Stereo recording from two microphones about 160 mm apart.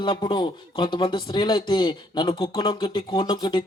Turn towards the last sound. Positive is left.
turn(degrees=25)  # may be behind; listen again after turning